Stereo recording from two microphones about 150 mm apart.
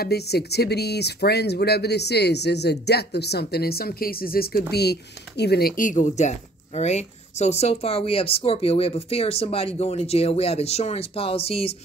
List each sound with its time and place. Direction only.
0.0 s speech: 90° left; by 11.7 s 40° left (ahead or behind)